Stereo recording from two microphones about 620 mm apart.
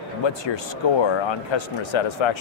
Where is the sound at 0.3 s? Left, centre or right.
Left.